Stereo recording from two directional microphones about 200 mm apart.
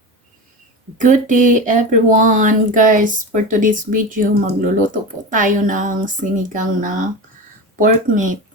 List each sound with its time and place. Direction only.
0.9 s speech: 40° right (ahead or behind)